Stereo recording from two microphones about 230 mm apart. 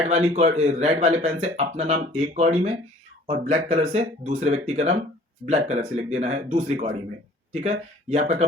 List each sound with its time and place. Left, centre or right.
0.1 s speech: right